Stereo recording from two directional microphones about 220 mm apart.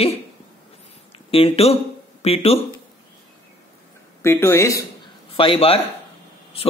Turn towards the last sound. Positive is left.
turn(degrees=25)  # may be behind; listen again after turning